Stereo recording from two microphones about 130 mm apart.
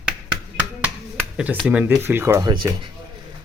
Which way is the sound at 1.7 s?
10° right (ahead or behind).